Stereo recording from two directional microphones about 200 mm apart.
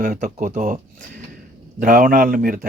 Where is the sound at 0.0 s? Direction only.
40° right (ahead or behind).